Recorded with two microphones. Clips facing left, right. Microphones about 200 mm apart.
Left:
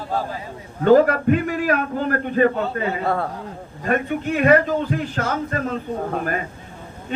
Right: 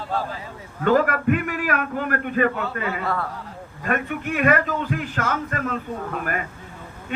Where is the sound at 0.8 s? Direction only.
30° left (ahead or behind).